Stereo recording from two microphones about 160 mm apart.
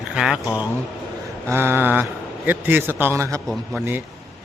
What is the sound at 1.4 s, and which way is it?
Speech, 15° right (ahead or behind).